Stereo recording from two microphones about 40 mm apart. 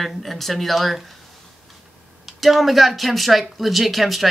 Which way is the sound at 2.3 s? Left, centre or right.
Centre.